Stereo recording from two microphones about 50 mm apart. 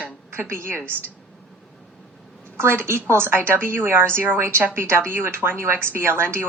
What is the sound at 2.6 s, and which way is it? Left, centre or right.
A woman's voice, right.